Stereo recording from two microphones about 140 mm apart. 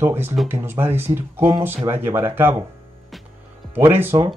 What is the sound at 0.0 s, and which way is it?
Speech, 15° right (ahead or behind).